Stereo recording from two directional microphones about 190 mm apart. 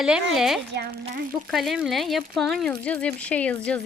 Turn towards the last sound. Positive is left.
turn(degrees=5)  # may be behind; listen again after turning